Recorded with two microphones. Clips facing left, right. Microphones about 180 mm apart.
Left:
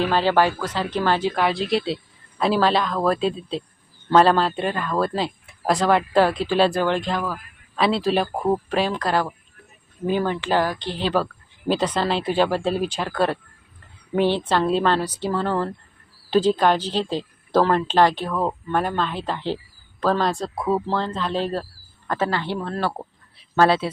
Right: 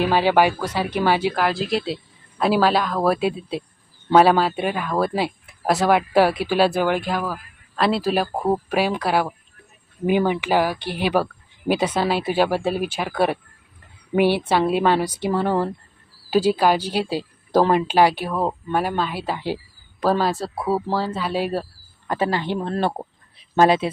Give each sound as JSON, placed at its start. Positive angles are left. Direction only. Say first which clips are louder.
{"t": 0.0, "sound": "speech", "louder": "right 2 dB", "side_deg": -15}
{"t": 8.4, "sound": "speech", "louder": "right 1 dB", "side_deg": -15}